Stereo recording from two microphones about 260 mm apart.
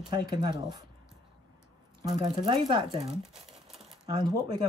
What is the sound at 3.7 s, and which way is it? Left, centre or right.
Shuffling cards, centre.